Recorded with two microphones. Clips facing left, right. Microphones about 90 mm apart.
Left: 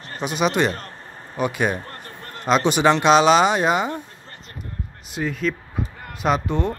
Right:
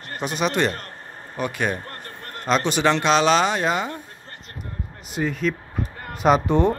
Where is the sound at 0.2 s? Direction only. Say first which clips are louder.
Left 2 dB; 5° left (ahead or behind).